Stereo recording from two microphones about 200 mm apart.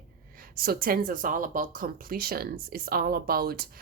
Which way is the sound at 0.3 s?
50° right (ahead or behind).